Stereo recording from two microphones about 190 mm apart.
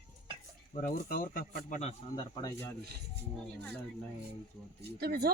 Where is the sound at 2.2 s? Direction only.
20° left (ahead or behind).